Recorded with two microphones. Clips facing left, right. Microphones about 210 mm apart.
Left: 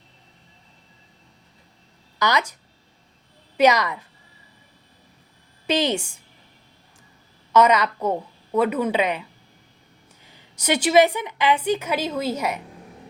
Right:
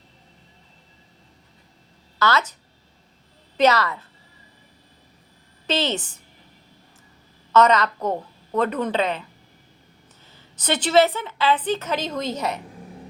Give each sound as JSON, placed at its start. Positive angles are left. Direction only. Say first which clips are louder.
{"t": 2.1, "sound": "speech", "louder": "right 1 dB", "side_deg": 15}
{"t": 3.6, "sound": "a woman's voice", "louder": "left 1 dB", "side_deg": 15}
{"t": 5.6, "sound": "a woman's voice", "louder": "left 2 dB", "side_deg": 15}
{"t": 7.5, "sound": "a woman's voice", "louder": "even", "side_deg": 10}
{"t": 10.2, "sound": "a woman's voice", "louder": "left 2 dB", "side_deg": 10}